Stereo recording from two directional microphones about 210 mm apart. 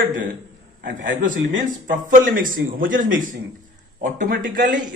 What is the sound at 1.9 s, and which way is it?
A man's voice, 40° right (ahead or behind).